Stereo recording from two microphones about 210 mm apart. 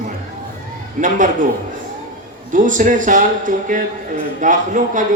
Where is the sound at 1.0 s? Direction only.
40° right (ahead or behind).